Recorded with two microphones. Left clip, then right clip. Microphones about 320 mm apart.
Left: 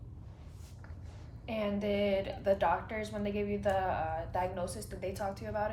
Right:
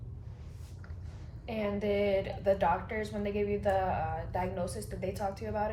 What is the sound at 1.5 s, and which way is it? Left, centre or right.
A woman's voice, centre.